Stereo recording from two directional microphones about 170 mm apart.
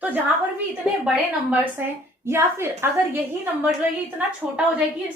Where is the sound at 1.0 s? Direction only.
5° right (ahead or behind).